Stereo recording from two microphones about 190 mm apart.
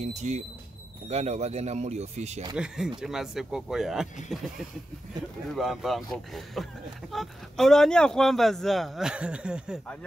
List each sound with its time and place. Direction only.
0.0 s speech: 35° right (ahead or behind)
2.5 s speech: 5° right (ahead or behind)
5.5 s speech: centre (ahead or behind)